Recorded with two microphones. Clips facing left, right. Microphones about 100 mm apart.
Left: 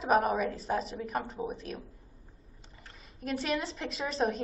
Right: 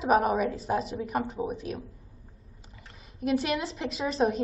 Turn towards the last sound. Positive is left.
turn(degrees=0)  # may be behind; listen again after turning